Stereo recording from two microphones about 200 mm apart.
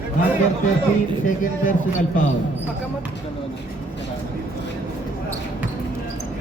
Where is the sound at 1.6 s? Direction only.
40° left (ahead or behind).